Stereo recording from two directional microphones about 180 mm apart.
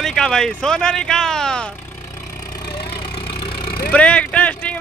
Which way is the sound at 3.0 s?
25° left (ahead or behind).